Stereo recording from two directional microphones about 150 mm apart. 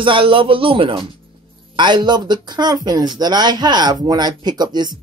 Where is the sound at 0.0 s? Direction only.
35° right (ahead or behind).